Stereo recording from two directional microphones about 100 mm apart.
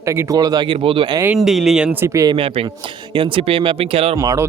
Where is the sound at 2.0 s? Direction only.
30° right (ahead or behind).